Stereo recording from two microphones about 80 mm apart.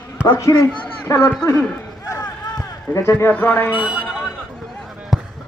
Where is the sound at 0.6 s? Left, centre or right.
Left.